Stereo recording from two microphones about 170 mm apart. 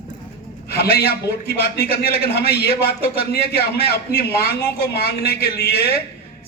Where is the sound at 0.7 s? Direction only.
70° left (ahead or behind).